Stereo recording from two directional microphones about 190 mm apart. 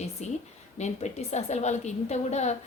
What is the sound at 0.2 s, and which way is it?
A woman's voice, 35° left (ahead or behind).